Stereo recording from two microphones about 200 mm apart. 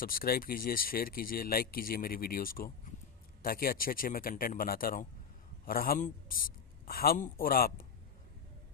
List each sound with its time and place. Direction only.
0.0 s speech: 45° left (ahead or behind)